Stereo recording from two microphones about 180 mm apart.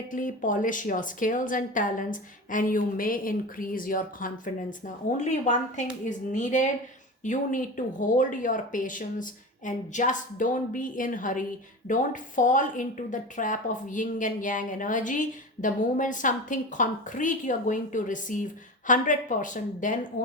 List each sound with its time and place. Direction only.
0.1 s speech: 45° left (ahead or behind)